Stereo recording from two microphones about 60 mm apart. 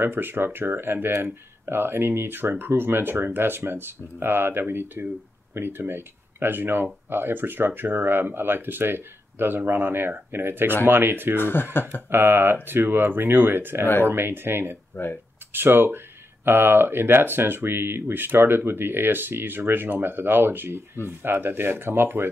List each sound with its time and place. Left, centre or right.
0.0 s speech: right
11.3 s speech: left
12.1 s speech: right